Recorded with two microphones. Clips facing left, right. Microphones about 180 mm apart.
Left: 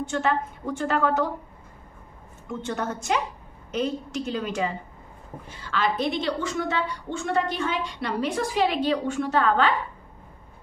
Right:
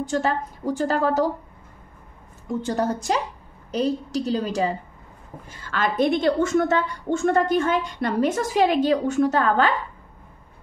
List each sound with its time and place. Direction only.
0.0 s a woman's voice: 35° right (ahead or behind)
2.6 s a woman's voice: 35° right (ahead or behind)
5.6 s a woman's voice: 50° right (ahead or behind)